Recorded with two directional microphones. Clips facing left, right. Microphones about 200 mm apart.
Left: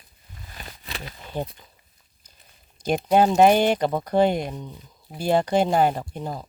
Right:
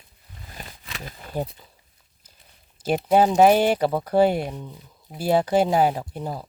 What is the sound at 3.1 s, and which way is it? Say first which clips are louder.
Speech: even; 5° right (ahead or behind).